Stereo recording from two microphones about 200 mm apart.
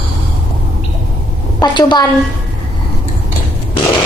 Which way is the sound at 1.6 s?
20° left (ahead or behind).